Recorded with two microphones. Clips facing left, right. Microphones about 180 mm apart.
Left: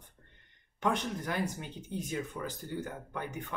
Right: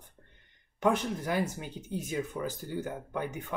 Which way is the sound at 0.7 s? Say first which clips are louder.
Right 4 dB; 5° right (ahead or behind).